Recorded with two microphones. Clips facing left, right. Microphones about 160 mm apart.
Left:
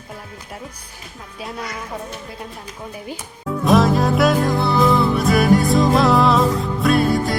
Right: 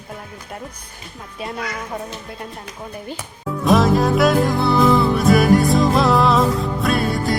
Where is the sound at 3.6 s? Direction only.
Centre (ahead or behind).